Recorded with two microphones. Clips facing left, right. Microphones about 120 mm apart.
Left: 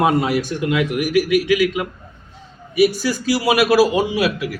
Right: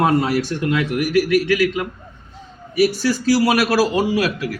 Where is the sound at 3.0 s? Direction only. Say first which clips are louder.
Right 2 dB; 5° left (ahead or behind).